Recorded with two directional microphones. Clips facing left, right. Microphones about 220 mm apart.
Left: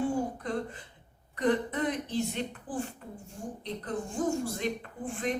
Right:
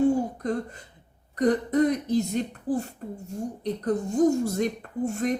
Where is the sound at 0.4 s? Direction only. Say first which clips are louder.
Right 5 dB; 40° right (ahead or behind).